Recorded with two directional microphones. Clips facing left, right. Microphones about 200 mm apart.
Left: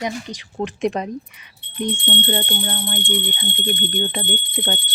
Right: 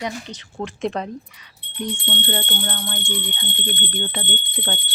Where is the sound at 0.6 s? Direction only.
15° left (ahead or behind).